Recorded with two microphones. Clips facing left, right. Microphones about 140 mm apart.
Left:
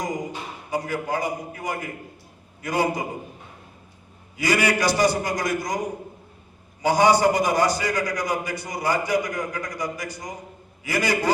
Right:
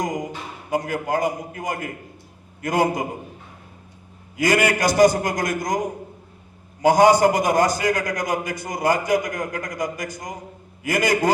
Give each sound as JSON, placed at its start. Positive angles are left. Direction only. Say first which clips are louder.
{"t": 0.7, "sound": "a man's voice", "louder": "right 3 dB", "side_deg": -50}
{"t": 4.4, "sound": "a man's voice", "louder": "right 3 dB", "side_deg": -50}
{"t": 6.8, "sound": "a man's voice", "louder": "right 3 dB", "side_deg": -45}